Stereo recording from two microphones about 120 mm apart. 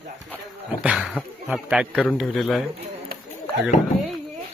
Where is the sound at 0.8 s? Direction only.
5° right (ahead or behind).